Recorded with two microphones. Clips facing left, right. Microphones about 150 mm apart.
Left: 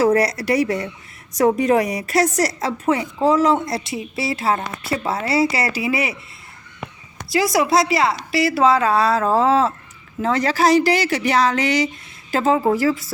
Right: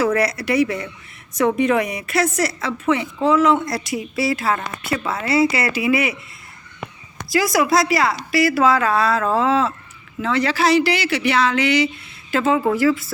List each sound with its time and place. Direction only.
0.0 s a woman's voice: 40° left (ahead or behind)
7.3 s a woman's voice: 30° left (ahead or behind)